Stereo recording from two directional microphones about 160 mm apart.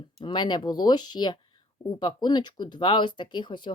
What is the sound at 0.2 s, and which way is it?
Speech, 25° left (ahead or behind).